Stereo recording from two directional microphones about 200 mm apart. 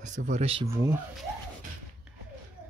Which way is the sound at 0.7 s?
10° right (ahead or behind).